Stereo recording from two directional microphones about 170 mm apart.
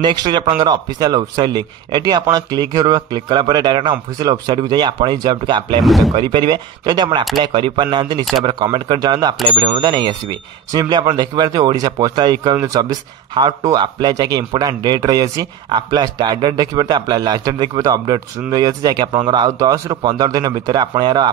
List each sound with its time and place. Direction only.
0.0 s a man's voice: 25° right (ahead or behind)
5.8 s speech: centre (ahead or behind)
6.1 s a man's voice: 25° right (ahead or behind)